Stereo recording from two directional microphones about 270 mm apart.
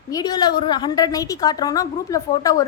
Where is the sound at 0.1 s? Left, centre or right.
Centre.